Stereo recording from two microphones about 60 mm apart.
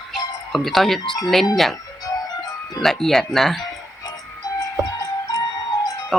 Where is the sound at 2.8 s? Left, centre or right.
Centre.